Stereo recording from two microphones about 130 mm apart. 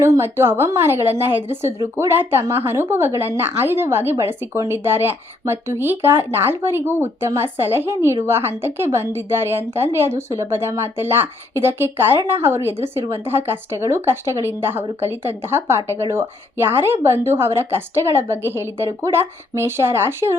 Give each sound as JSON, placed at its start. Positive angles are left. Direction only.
{"t": 0.0, "sound": "a woman's voice", "side_deg": -20}